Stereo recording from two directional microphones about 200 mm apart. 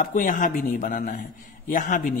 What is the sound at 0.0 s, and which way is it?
A man's voice, 40° left (ahead or behind).